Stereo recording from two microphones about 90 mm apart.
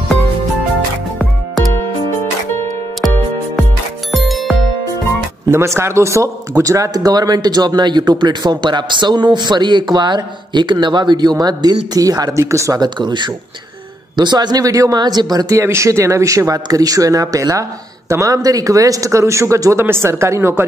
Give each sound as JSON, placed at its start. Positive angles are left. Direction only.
{"t": 4.1, "sound": "music", "side_deg": 0}
{"t": 5.5, "sound": "speech", "side_deg": -30}
{"t": 12.7, "sound": "speech", "side_deg": -55}
{"t": 15.5, "sound": "speech", "side_deg": -35}